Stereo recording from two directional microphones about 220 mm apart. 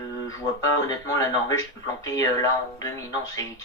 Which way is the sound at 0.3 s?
15° left (ahead or behind).